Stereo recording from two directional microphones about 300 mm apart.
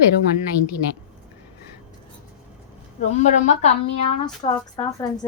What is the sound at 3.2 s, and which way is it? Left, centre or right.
Speech, left.